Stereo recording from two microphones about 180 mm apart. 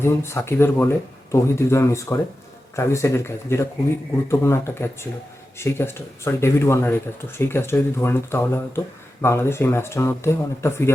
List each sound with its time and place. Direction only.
0.0 s speech: 15° left (ahead or behind)